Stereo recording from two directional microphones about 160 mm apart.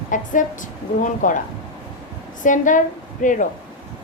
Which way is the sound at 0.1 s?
55° left (ahead or behind).